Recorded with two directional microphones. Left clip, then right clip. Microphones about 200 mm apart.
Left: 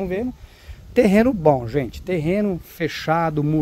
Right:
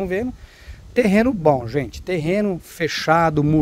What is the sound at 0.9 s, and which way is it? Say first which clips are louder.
Speech: left 1 dB; 10° left (ahead or behind).